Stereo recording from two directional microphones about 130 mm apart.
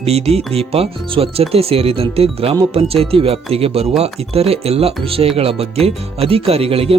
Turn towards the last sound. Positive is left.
turn(degrees=-45)  # may be behind; listen again after turning